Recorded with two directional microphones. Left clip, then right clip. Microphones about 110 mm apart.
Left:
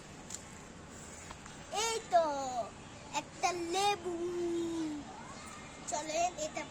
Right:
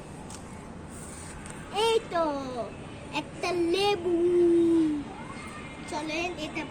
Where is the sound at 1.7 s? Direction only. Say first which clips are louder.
Right 5 dB; 45° left (ahead or behind).